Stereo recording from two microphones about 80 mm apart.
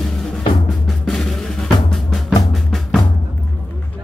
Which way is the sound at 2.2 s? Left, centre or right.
Centre.